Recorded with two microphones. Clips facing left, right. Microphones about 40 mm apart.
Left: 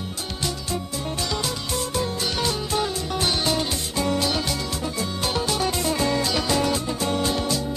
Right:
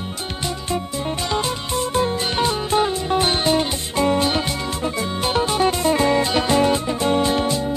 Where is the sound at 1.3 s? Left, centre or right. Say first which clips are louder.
Right 5 dB; right.